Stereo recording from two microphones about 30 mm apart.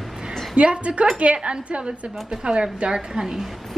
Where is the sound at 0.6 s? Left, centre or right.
Right.